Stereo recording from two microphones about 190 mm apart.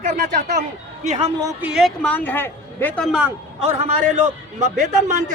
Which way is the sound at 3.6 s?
35° right (ahead or behind).